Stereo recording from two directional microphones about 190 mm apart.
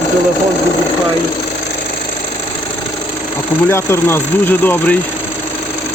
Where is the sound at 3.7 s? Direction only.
10° left (ahead or behind).